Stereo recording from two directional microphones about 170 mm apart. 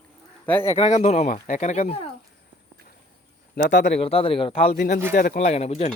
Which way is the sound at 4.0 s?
35° left (ahead or behind).